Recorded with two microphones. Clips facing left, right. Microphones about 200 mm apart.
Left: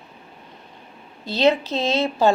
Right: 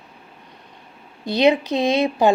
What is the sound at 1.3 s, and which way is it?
Speech, 15° right (ahead or behind).